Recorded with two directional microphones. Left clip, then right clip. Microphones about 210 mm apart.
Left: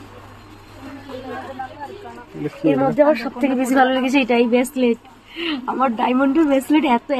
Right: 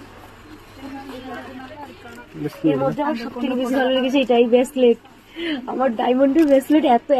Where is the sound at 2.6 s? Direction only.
35° left (ahead or behind).